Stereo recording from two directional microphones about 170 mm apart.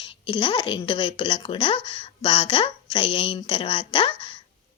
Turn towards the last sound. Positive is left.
turn(degrees=30)  # may be behind; listen again after turning